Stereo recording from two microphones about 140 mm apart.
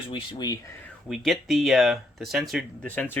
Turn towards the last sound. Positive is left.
turn(degrees=10)  # may be behind; listen again after turning